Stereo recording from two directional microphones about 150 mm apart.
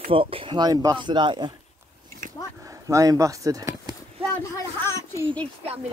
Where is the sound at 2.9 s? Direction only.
20° right (ahead or behind).